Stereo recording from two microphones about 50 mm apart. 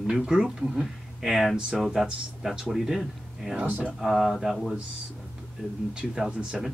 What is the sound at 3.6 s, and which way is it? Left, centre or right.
Speech, right.